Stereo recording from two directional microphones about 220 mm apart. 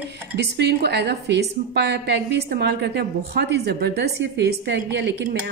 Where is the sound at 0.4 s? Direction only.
50° right (ahead or behind).